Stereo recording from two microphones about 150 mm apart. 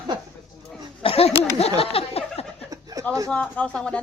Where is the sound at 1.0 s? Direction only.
40° left (ahead or behind).